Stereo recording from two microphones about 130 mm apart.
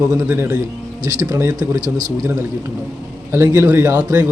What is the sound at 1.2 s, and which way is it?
Speech, 25° right (ahead or behind).